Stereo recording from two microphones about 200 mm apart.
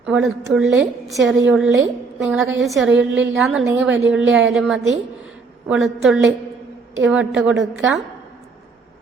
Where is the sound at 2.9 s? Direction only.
70° right (ahead or behind).